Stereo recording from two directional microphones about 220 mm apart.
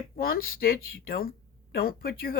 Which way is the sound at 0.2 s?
40° left (ahead or behind).